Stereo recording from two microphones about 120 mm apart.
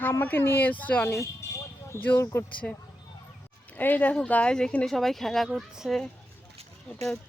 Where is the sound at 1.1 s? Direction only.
25° left (ahead or behind); by 6.0 s 5° right (ahead or behind).